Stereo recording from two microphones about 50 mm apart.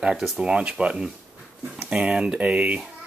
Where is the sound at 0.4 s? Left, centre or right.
Centre.